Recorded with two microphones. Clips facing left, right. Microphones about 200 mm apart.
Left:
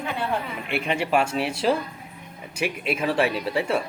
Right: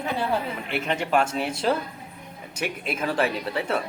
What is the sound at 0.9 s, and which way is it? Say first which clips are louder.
Speech: left 1 dB; 10° left (ahead or behind).